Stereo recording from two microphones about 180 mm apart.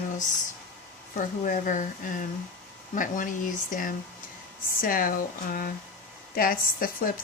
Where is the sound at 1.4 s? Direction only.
45° left (ahead or behind).